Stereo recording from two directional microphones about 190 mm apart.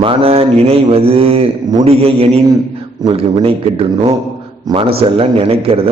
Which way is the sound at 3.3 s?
25° right (ahead or behind).